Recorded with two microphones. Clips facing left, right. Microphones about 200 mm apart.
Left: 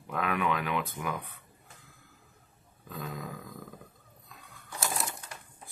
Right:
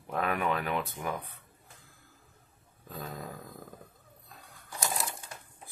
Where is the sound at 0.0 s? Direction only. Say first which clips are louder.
Even; 40° right (ahead or behind).